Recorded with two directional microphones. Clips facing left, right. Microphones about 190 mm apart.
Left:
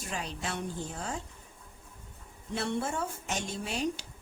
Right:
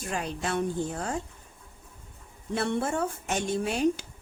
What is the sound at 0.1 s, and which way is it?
A woman's voice, 55° right (ahead or behind).